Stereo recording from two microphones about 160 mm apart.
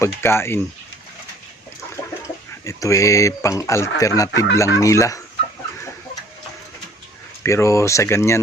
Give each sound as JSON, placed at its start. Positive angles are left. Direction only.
{"t": 0.0, "sound": "speech", "side_deg": 15}
{"t": 2.2, "sound": "speech", "side_deg": 20}
{"t": 7.4, "sound": "speech", "side_deg": 20}